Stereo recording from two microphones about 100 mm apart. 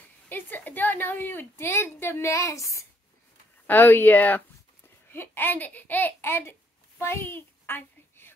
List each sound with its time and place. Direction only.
0.3 s a woman's voice: 20° left (ahead or behind)
3.6 s a child's voice: 20° left (ahead or behind)
7.0 s a sound: 25° left (ahead or behind)